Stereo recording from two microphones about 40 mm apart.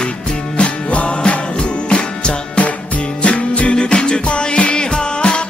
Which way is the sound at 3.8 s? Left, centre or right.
Left.